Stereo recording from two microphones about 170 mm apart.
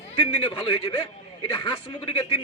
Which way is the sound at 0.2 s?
30° left (ahead or behind).